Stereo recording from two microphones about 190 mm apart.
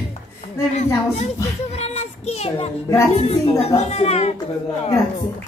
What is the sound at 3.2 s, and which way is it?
Speech, 30° left (ahead or behind).